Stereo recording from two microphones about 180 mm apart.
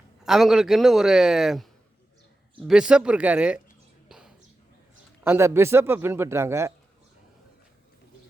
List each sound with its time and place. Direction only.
0.3 s a man's voice: centre (ahead or behind)
4.1 s a sound: 5° right (ahead or behind)
5.2 s speech: 15° right (ahead or behind)